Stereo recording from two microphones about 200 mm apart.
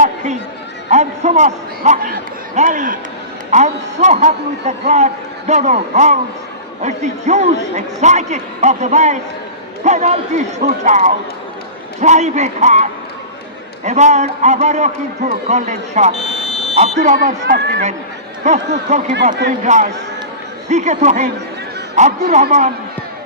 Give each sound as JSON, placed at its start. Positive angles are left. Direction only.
{"t": 0.9, "sound": "a sound", "side_deg": -35}
{"t": 2.6, "sound": "a man's voice", "side_deg": -40}
{"t": 16.4, "sound": "buzzer", "side_deg": 30}
{"t": 16.7, "sound": "a man's voice", "side_deg": -35}